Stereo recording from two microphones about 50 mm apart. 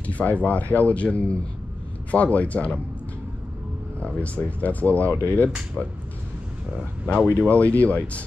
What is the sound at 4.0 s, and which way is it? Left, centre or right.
Speech, left.